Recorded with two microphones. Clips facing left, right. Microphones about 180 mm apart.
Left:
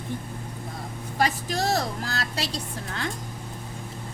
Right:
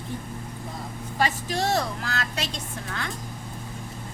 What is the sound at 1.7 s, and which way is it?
A woman's voice, 35° left (ahead or behind).